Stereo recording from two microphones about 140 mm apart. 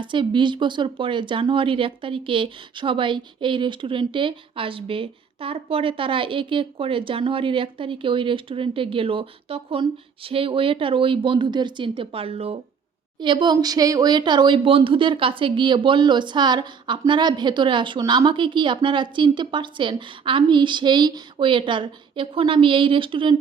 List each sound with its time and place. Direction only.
0.0 s speech: 35° right (ahead or behind)